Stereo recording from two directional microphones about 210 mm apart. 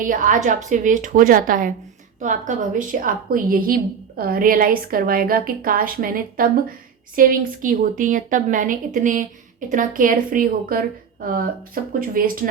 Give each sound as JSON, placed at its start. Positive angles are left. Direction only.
{"t": 0.0, "sound": "a woman's voice", "side_deg": -40}